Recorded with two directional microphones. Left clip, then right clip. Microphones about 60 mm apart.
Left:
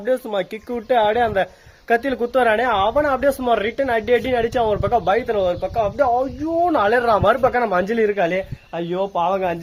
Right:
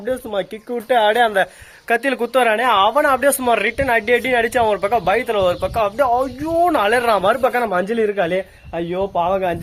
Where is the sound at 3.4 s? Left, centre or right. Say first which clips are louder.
Right 2 dB; left.